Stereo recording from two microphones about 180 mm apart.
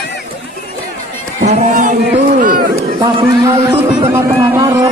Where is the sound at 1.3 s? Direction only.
45° right (ahead or behind).